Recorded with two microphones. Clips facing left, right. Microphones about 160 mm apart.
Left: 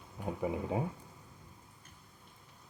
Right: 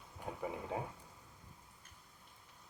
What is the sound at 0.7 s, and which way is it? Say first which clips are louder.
Speech: left 5 dB; 5° left (ahead or behind).